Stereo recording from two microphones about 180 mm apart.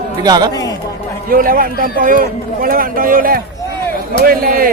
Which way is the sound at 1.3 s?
50° right (ahead or behind).